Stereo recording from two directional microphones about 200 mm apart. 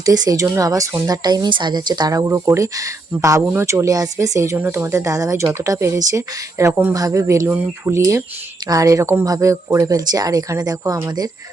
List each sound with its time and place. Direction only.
0.0 s speech: 20° right (ahead or behind)